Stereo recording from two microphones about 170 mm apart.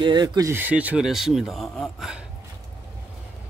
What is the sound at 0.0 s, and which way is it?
Speech, 25° right (ahead or behind).